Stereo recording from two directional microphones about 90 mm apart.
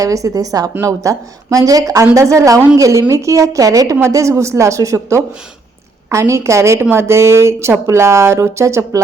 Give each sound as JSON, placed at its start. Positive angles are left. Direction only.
{"t": 0.0, "sound": "speech", "side_deg": -40}